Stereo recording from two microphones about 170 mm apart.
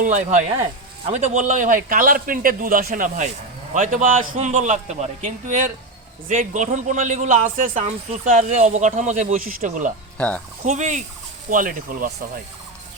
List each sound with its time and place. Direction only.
0.0 s a man's voice: 45° right (ahead or behind)
10.2 s speech: 5° left (ahead or behind)
10.7 s a man's voice: 45° right (ahead or behind)